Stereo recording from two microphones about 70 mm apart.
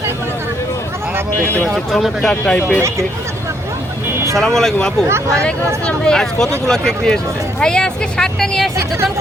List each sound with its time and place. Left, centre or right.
1.1 s a sound: right
1.6 s speech: centre
2.3 s speech: centre
2.6 s speech: left
4.4 s speech: centre
5.0 s speech: right
5.4 s speech: centre